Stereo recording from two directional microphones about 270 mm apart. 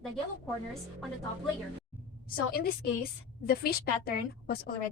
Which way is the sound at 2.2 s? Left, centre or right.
Left.